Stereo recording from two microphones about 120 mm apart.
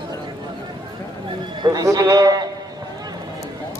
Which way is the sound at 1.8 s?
25° right (ahead or behind).